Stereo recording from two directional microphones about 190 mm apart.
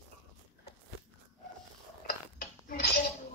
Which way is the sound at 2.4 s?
55° left (ahead or behind).